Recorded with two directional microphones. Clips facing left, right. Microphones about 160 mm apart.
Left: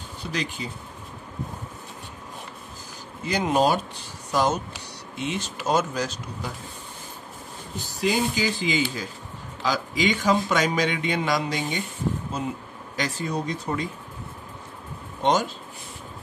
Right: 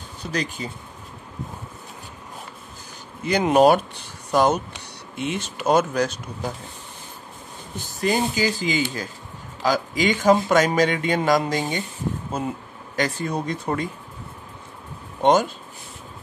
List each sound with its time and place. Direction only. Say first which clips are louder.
0.3 s speech: right 3 dB; 45° right (ahead or behind)
3.3 s speech: right 6 dB; 65° right (ahead or behind)
7.7 s speech: right 2 dB; 50° right (ahead or behind)